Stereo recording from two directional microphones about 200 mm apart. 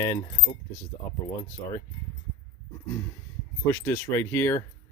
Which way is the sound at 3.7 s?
10° left (ahead or behind).